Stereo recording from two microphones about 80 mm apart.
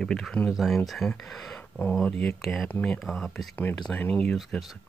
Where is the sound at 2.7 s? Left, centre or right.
Centre.